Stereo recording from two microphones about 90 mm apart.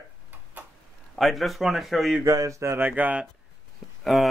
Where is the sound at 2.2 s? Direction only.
40° right (ahead or behind); by 3.3 s 15° right (ahead or behind).